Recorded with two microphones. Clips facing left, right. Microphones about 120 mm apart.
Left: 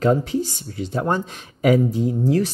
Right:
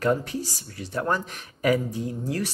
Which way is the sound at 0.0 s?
25° left (ahead or behind).